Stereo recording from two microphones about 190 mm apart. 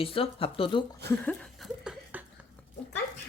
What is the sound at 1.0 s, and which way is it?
Laughter, 5° left (ahead or behind).